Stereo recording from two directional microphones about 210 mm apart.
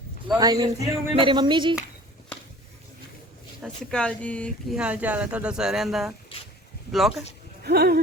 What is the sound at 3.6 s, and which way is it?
Speech, 5° left (ahead or behind).